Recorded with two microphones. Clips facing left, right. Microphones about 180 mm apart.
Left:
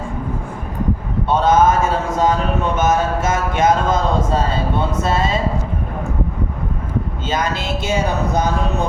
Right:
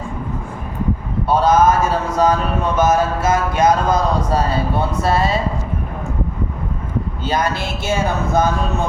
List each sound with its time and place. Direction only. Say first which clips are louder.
1.3 s a sound: even; 25° left (ahead or behind)
2.7 s speech: right 3 dB; 25° left (ahead or behind)
7.3 s speech: right 2 dB; 20° left (ahead or behind)